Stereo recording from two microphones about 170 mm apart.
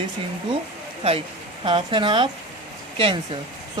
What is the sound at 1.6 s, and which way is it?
Speech, 30° right (ahead or behind).